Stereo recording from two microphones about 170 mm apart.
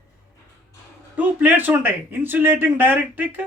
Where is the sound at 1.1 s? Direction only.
10° right (ahead or behind).